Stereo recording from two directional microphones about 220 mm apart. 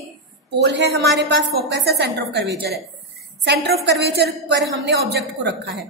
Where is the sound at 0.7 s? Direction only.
50° right (ahead or behind).